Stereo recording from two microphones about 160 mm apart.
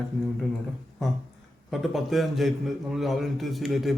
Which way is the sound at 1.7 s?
Centre (ahead or behind).